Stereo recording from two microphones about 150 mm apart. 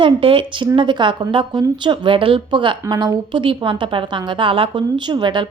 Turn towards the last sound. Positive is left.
turn(degrees=-30)  # may be behind; listen again after turning